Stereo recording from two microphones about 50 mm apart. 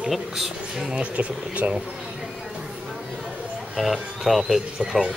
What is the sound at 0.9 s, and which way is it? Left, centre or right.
Speech, right.